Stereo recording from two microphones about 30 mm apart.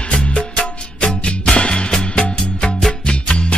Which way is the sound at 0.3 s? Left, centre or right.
Left.